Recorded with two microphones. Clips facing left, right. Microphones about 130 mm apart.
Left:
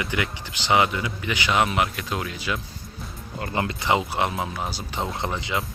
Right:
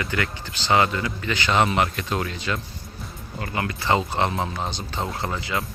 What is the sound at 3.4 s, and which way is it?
Speech, 25° left (ahead or behind).